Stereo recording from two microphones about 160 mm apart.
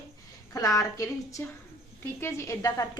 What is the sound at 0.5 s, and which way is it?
A woman's voice, 20° left (ahead or behind).